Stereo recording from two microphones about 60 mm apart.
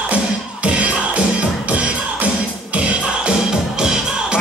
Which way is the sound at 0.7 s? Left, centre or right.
Right.